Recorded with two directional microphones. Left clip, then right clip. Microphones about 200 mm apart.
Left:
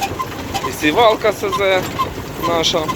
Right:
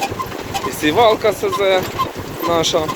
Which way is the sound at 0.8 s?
15° right (ahead or behind).